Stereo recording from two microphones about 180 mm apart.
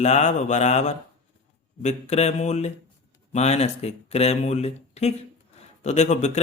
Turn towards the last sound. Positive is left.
turn(degrees=40)  # may be behind; listen again after turning